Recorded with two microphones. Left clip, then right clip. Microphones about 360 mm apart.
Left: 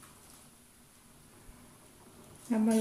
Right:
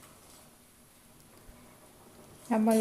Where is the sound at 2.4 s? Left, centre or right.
Right.